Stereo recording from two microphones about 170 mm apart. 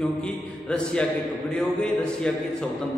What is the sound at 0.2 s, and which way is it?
A man's voice, 5° left (ahead or behind).